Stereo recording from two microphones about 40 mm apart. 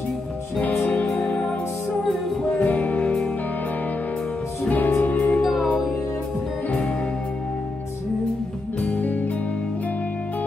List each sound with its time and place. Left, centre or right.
0.8 s music: left
2.6 s music: left
4.6 s music: left
5.4 s music: centre
8.8 s music: left